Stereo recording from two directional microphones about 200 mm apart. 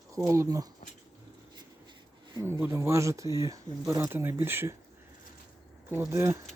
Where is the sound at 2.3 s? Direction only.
15° right (ahead or behind).